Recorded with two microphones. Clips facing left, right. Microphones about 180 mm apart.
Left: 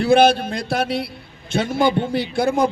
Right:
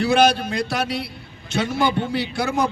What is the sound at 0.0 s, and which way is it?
A man's voice, 55° left (ahead or behind).